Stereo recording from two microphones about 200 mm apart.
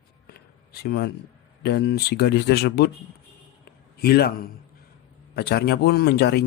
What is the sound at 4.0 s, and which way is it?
A man's voice, 50° left (ahead or behind).